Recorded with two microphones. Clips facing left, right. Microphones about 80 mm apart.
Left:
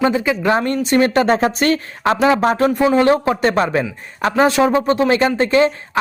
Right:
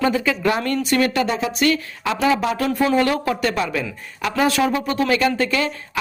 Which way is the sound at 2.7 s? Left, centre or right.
Centre.